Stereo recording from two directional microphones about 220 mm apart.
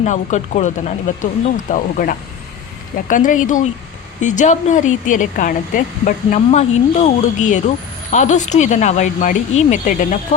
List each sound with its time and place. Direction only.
0.0 s speech: 30° left (ahead or behind)